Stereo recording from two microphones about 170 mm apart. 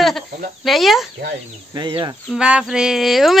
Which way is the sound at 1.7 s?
25° right (ahead or behind).